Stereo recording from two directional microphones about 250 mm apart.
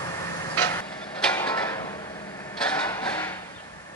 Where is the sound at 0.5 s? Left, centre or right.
Centre.